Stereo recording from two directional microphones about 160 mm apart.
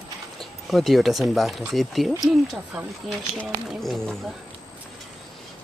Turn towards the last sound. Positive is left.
turn(degrees=0)  # may be behind; listen again after turning